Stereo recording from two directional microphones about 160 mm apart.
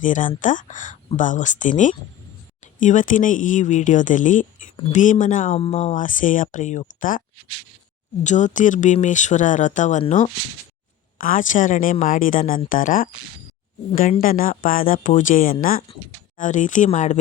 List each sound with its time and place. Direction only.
0.0 s speech: 55° left (ahead or behind)
5.5 s speech: 40° left (ahead or behind)
8.2 s a woman's voice: 50° left (ahead or behind)
14.2 s a woman's voice: 60° left (ahead or behind)